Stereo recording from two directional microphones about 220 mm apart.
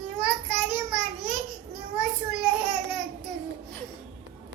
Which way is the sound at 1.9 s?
Centre (ahead or behind).